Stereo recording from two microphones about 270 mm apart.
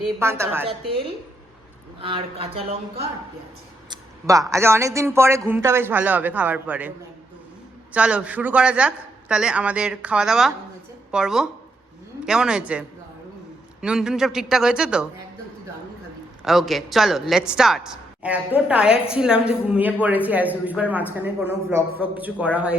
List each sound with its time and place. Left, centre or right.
0.2 s speech: centre
0.7 s speech: centre
7.9 s speech: centre
13.8 s speech: centre
16.4 s speech: centre